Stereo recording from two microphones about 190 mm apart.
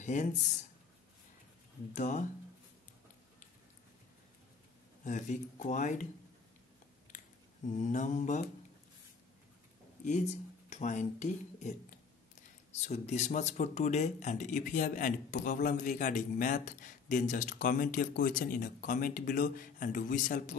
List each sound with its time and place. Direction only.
0.0 s speech: 40° left (ahead or behind)
2.0 s speech: 40° left (ahead or behind)
5.0 s speech: 40° left (ahead or behind)
7.7 s speech: 40° left (ahead or behind)
10.7 s speech: 40° left (ahead or behind)
12.7 s speech: 35° left (ahead or behind)